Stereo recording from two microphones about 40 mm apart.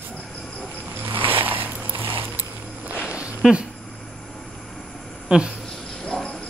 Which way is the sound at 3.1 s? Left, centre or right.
Right.